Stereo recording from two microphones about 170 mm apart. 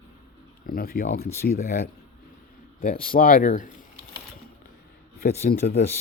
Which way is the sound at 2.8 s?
60° left (ahead or behind).